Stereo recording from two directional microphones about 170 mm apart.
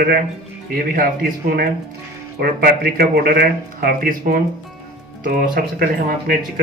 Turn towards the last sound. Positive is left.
turn(degrees=-60)  # may be behind; listen again after turning